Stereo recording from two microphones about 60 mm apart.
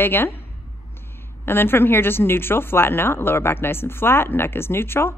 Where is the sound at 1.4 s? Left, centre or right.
Left.